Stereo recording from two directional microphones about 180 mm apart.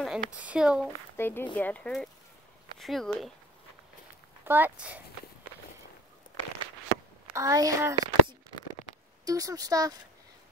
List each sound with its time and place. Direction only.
0.0 s speech: centre (ahead or behind)
1.1 s speech: 10° left (ahead or behind)
4.5 s speech: 10° right (ahead or behind)
7.3 s speech: 20° right (ahead or behind)